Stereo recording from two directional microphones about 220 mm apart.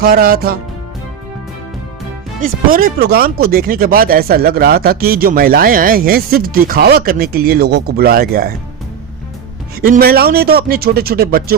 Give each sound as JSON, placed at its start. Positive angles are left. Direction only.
{"t": 0.0, "sound": "speech", "side_deg": -40}
{"t": 2.4, "sound": "speech", "side_deg": -40}
{"t": 9.8, "sound": "speech", "side_deg": -45}